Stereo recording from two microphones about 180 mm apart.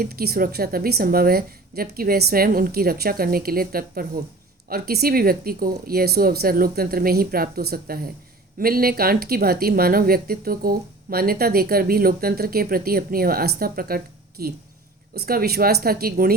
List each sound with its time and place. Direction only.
0.0 s speech: 60° right (ahead or behind)